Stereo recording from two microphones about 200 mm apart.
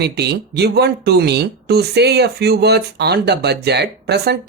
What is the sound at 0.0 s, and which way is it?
Speech, 55° right (ahead or behind).